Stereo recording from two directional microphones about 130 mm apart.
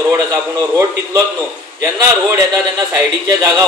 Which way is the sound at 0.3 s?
20° right (ahead or behind).